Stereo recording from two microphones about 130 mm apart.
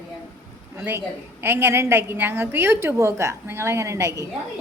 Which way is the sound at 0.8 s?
20° right (ahead or behind).